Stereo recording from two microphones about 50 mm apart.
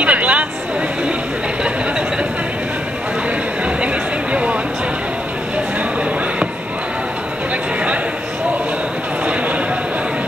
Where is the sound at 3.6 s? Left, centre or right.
Right.